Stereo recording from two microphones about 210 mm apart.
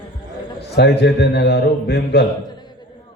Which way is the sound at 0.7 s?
50° left (ahead or behind).